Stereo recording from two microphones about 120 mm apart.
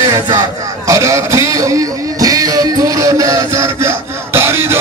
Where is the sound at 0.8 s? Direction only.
25° right (ahead or behind).